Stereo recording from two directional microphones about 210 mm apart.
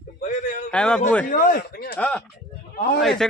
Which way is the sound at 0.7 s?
5° left (ahead or behind).